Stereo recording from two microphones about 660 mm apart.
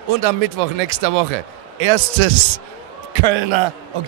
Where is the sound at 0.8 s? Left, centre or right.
Right.